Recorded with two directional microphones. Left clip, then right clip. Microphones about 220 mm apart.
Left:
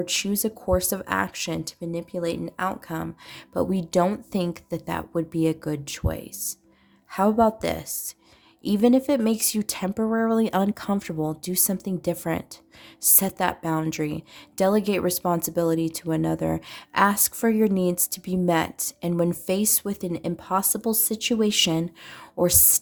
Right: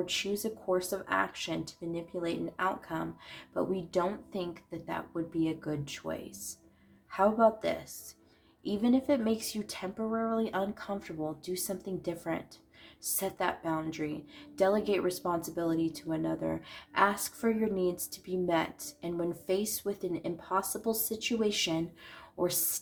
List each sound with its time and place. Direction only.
0.0 s a woman's voice: 50° left (ahead or behind)